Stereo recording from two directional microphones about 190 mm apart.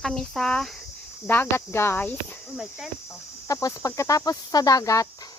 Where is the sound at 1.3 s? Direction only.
10° left (ahead or behind).